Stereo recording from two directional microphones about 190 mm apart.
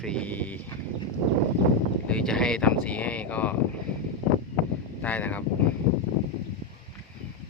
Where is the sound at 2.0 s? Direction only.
5° left (ahead or behind).